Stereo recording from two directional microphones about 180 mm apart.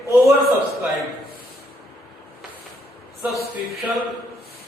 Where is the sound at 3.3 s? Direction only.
10° right (ahead or behind).